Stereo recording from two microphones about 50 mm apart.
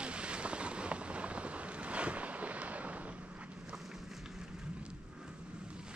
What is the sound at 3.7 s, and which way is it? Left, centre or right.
Run, centre.